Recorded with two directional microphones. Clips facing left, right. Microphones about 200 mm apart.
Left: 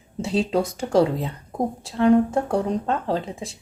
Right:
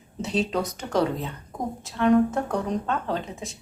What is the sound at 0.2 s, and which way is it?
Speech, 30° left (ahead or behind).